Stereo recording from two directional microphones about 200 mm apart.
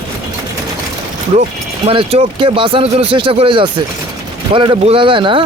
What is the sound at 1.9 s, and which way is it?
Speech, 30° right (ahead or behind).